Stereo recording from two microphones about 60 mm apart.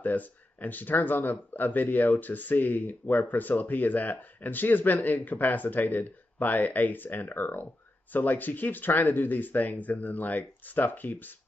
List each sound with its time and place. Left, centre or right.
0.0 s speech: left